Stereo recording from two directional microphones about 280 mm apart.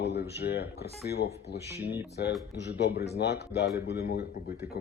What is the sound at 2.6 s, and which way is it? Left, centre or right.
Speech, left.